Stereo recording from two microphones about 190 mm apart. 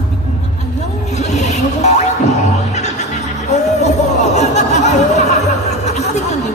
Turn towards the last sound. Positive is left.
turn(degrees=35)  # may be behind; listen again after turning